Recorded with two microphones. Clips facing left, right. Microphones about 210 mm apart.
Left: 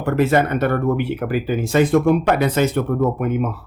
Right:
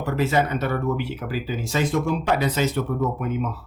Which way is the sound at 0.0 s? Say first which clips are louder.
Left 5 dB; 55° left (ahead or behind).